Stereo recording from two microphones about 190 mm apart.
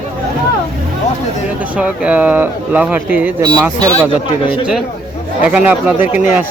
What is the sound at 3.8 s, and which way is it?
Speech, 30° left (ahead or behind).